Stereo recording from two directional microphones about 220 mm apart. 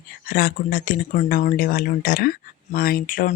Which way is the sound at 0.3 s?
40° left (ahead or behind).